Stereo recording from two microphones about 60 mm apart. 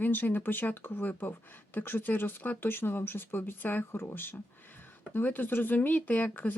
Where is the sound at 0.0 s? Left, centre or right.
Left.